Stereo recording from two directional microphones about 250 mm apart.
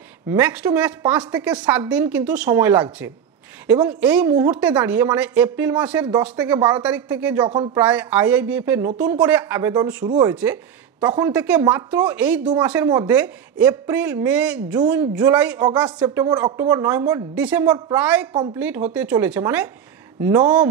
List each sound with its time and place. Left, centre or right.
0.3 s a woman's voice: centre
7.4 s speech: centre
7.8 s a woman's voice: centre